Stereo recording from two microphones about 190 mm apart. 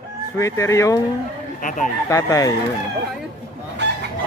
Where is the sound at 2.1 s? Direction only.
15° left (ahead or behind).